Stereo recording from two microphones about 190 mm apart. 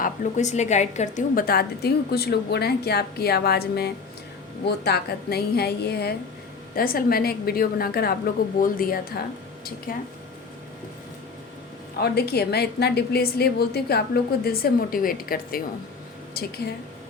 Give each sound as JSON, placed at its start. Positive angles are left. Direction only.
{"t": 0.0, "sound": "a woman's voice", "side_deg": 40}
{"t": 11.9, "sound": "a woman's voice", "side_deg": 55}